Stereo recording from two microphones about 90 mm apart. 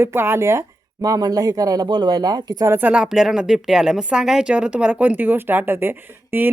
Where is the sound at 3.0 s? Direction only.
5° right (ahead or behind).